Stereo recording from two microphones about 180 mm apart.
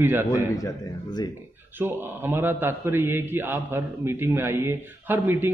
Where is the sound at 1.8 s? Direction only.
10° right (ahead or behind).